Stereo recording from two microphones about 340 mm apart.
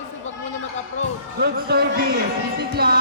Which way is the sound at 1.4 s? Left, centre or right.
Right.